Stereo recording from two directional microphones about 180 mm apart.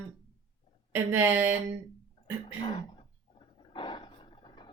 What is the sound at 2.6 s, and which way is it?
Speech, 25° left (ahead or behind).